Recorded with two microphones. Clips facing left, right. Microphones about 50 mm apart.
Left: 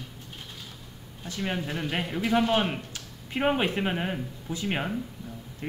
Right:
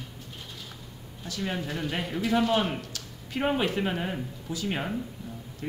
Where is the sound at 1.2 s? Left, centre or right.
Left.